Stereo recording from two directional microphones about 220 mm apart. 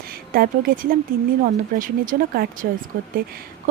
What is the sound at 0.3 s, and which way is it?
A woman's voice, 40° right (ahead or behind).